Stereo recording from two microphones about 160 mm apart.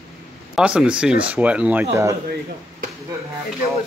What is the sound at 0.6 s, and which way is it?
Speech, 5° right (ahead or behind).